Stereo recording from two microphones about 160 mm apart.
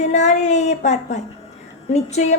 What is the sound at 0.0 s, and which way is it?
A woman's voice, 45° left (ahead or behind).